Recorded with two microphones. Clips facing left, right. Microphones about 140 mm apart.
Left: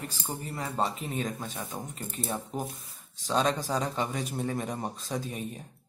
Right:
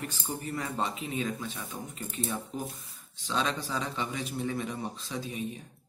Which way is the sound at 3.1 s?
40° left (ahead or behind).